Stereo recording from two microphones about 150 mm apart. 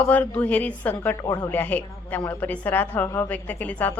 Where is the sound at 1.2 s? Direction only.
20° left (ahead or behind).